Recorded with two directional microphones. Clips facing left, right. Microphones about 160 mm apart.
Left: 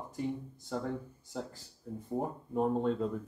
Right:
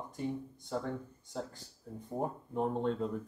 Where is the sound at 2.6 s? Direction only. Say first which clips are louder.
Left 2 dB; 5° left (ahead or behind).